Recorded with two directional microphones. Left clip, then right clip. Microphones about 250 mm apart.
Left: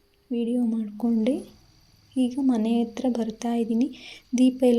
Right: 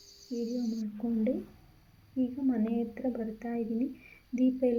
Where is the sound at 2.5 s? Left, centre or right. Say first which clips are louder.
Left 7 dB; left.